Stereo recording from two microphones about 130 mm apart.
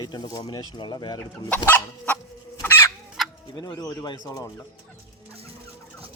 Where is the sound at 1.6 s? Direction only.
15° left (ahead or behind).